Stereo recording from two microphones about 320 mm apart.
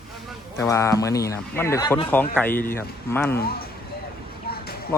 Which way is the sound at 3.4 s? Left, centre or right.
Left.